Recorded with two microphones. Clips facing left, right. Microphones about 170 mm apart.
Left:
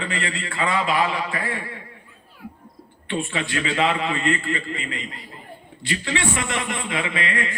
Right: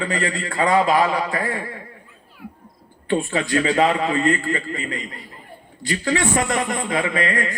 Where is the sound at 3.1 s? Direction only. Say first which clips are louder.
Right 6 dB; 40° right (ahead or behind).